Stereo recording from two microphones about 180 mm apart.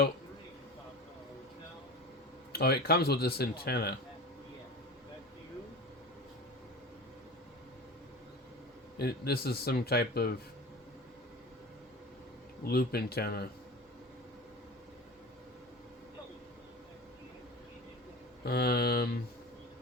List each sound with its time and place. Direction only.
2.5 s speech: 60° left (ahead or behind)
9.0 s speech: 60° left (ahead or behind)
12.6 s speech: 60° left (ahead or behind)
18.4 s speech: 60° left (ahead or behind)